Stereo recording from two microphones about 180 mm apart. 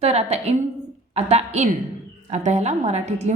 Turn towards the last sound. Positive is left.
turn(degrees=-40)  # may be behind; listen again after turning